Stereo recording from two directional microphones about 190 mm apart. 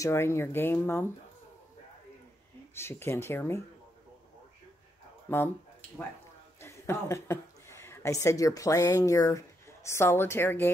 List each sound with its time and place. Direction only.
0.0 s speech: 15° left (ahead or behind)
2.7 s speech: 15° left (ahead or behind)
5.3 s a woman's voice: 10° left (ahead or behind)